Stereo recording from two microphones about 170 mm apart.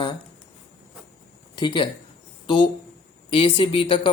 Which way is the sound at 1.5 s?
25° left (ahead or behind).